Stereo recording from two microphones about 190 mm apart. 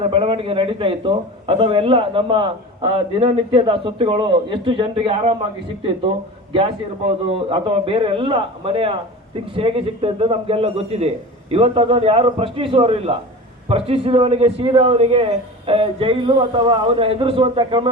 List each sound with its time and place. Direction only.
0.0 s a man's voice: 30° right (ahead or behind)
7.5 s a man's voice: 25° right (ahead or behind)